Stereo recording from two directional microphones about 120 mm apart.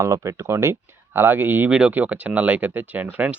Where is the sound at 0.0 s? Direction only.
25° right (ahead or behind).